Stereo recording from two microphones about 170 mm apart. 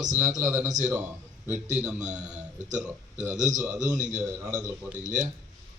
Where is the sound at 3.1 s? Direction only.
45° right (ahead or behind).